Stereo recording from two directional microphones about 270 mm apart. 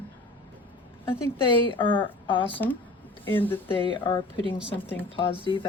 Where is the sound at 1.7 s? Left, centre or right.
Centre.